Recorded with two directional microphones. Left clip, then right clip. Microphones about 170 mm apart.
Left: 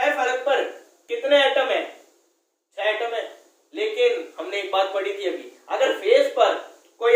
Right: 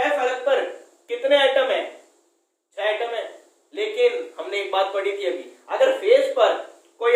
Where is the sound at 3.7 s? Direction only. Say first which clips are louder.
Even; 20° right (ahead or behind).